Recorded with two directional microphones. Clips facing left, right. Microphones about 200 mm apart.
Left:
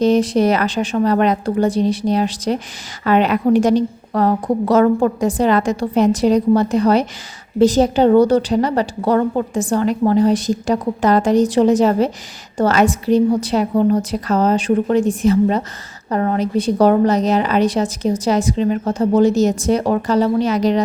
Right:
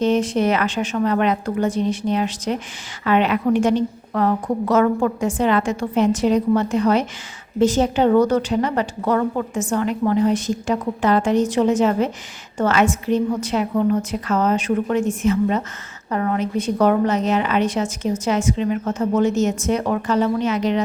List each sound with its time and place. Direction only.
0.0 s a woman's voice: 35° left (ahead or behind)